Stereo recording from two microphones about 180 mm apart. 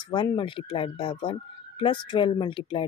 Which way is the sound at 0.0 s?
25° left (ahead or behind).